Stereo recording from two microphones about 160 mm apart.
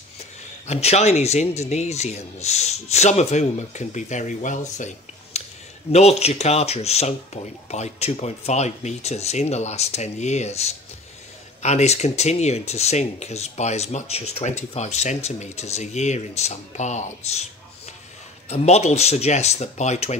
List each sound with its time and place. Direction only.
0.2 s speech: 40° left (ahead or behind)
18.5 s speech: 45° left (ahead or behind)